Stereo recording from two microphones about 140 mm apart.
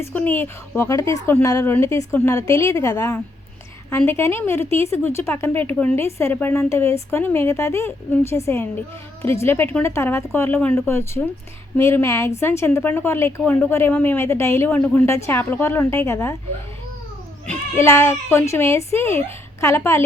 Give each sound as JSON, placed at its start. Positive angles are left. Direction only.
{"t": 0.0, "sound": "a woman's voice", "side_deg": 15}
{"t": 17.5, "sound": "a woman's voice", "side_deg": 20}